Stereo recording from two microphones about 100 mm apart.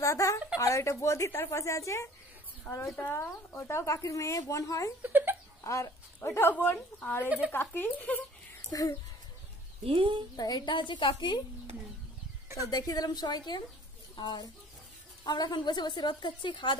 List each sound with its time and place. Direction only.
0.0 s a woman's voice: 30° left (ahead or behind)
5.0 s speech: 20° right (ahead or behind)
5.6 s a woman's voice: 30° left (ahead or behind)
7.2 s speech: 10° right (ahead or behind)
7.5 s a woman's voice: 20° left (ahead or behind)
8.6 s speech: 35° left (ahead or behind)
9.8 s speech: 60° right (ahead or behind)
10.3 s a woman's voice: 40° left (ahead or behind)
12.6 s a woman's voice: 40° left (ahead or behind)